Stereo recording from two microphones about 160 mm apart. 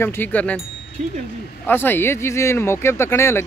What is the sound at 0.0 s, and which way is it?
Speech, 15° left (ahead or behind).